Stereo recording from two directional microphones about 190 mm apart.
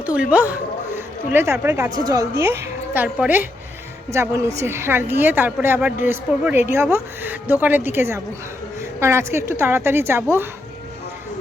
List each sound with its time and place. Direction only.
0.0 s a woman's voice: 5° right (ahead or behind)